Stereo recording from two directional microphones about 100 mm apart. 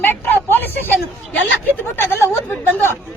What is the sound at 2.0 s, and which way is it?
A woman's voice, 25° left (ahead or behind).